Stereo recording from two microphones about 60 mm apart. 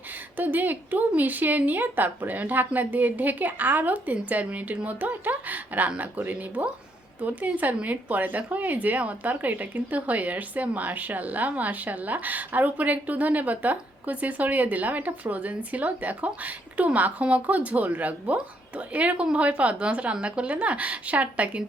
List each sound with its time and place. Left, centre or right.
0.3 s speech: right